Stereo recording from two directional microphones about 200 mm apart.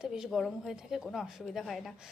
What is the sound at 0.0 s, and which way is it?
A woman's voice, centre (ahead or behind).